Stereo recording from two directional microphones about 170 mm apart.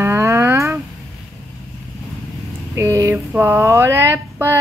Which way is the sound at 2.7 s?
15° right (ahead or behind).